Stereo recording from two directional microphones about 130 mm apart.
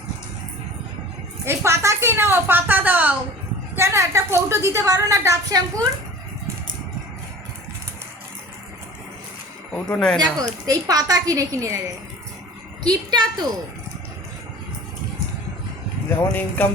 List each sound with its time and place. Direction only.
1.5 s a woman's voice: 20° right (ahead or behind)
9.7 s speech: 10° left (ahead or behind)
10.4 s a woman's voice: 25° right (ahead or behind)
12.8 s a woman's voice: 30° right (ahead or behind)
16.0 s speech: 15° left (ahead or behind)